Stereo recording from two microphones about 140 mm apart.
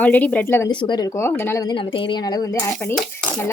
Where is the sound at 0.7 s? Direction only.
35° left (ahead or behind); by 1.6 s 15° left (ahead or behind).